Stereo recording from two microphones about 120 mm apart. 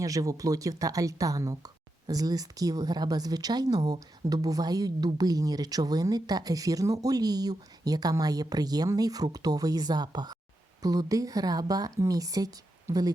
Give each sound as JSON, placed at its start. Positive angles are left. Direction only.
{"t": 0.0, "sound": "speech", "side_deg": -30}